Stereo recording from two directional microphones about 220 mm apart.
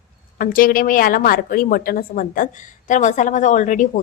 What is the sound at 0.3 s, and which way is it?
A woman's voice, 40° left (ahead or behind).